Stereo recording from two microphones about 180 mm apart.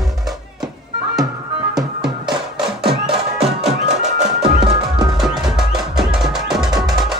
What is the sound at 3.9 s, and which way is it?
Music, 40° right (ahead or behind).